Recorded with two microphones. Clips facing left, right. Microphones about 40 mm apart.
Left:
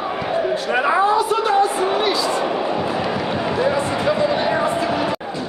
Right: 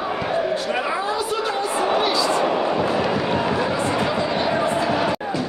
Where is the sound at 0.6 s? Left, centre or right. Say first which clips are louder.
Left 6 dB; left.